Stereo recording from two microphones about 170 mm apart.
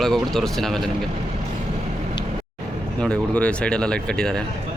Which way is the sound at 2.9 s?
5° left (ahead or behind).